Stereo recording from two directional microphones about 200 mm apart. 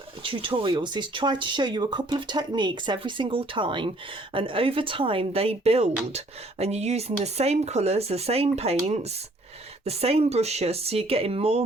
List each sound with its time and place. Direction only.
0.2 s speech: 25° right (ahead or behind)